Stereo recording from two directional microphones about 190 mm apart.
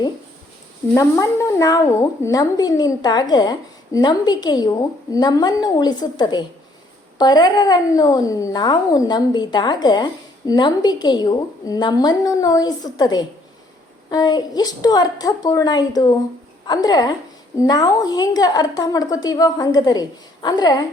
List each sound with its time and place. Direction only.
0.9 s a woman's voice: 15° left (ahead or behind)